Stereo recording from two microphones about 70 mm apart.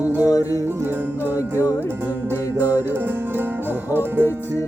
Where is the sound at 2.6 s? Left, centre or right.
Right.